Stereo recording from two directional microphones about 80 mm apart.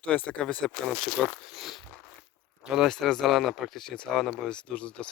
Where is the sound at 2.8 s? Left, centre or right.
Centre.